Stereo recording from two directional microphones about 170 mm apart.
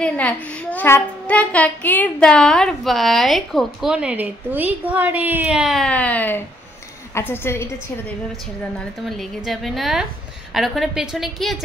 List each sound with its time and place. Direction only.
0.0 s child singing: 5° left (ahead or behind)
7.2 s a woman's voice: 15° left (ahead or behind)
8.7 s child singing: centre (ahead or behind)